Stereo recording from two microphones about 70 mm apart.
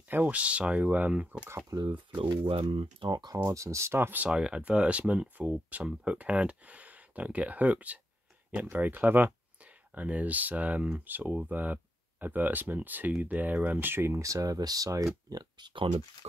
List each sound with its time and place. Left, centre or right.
0.1 s speech: right
1.8 s speech: right
3.4 s speech: right
4.3 s speech: centre; by 14.2 s right
14.2 s speech: right
15.2 s speech: right